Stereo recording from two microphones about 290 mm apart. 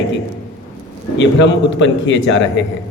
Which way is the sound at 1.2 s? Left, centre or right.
Left.